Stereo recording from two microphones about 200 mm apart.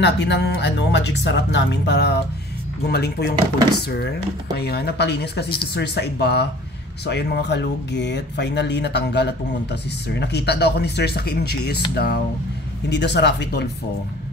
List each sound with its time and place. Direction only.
0.0 s speech: 60° left (ahead or behind)
4.6 s speech: 55° left (ahead or behind)